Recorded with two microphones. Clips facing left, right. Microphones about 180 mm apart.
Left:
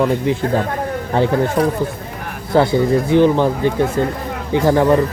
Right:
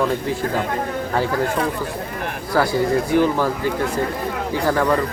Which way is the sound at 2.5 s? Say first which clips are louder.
Left 4 dB; 20° left (ahead or behind).